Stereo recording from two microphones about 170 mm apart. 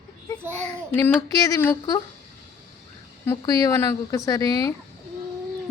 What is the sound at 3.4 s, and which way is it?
Speech, 20° left (ahead or behind).